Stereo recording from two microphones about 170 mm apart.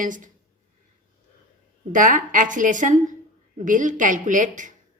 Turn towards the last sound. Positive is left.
turn(degrees=-50)  # may be behind; listen again after turning